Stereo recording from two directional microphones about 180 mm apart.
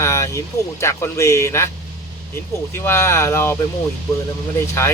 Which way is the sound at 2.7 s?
15° left (ahead or behind).